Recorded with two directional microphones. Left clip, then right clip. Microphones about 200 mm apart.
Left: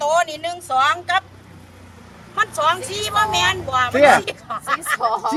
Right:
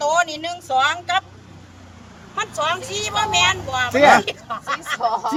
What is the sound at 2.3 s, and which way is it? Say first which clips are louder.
Speech: left 4 dB; centre (ahead or behind).